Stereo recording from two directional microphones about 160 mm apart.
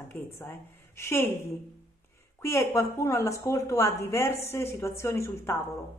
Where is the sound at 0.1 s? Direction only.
15° left (ahead or behind).